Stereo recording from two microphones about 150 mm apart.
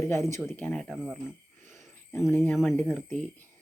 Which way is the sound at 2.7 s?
10° left (ahead or behind).